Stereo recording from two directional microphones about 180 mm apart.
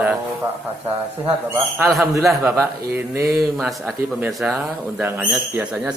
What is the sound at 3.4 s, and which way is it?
A man's voice, centre (ahead or behind).